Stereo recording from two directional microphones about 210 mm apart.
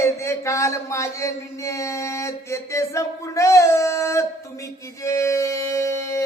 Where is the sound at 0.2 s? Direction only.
15° left (ahead or behind).